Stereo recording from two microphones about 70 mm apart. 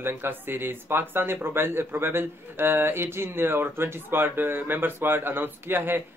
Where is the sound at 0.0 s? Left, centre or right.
Right.